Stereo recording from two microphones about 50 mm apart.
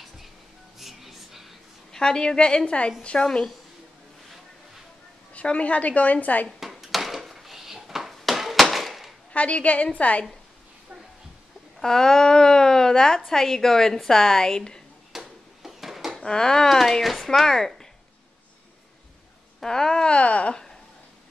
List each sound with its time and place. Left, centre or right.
0.7 s music: centre
1.9 s a woman's voice: centre
5.3 s a woman's voice: left
6.6 s dishes: centre
9.3 s a woman's voice: left
11.8 s a woman's voice: centre
15.1 s a sound: centre
16.2 s a woman's voice: centre
19.6 s a woman's voice: centre